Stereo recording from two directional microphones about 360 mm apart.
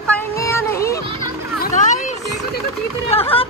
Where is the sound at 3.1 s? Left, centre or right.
Centre.